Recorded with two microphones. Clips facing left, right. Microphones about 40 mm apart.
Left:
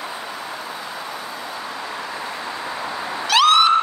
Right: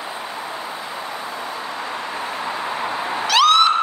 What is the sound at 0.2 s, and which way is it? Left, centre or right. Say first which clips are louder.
Vehicle: right 2 dB; right.